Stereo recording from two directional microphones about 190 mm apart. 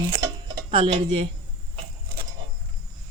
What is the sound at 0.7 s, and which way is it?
Speech, 30° right (ahead or behind).